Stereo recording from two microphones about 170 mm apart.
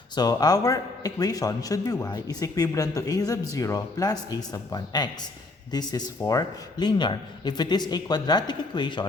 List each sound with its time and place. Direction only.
0.2 s a man's voice: 20° left (ahead or behind)